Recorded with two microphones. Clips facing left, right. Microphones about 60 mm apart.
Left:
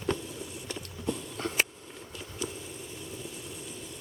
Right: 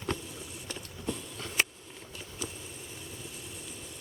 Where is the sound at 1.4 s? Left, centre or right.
Left.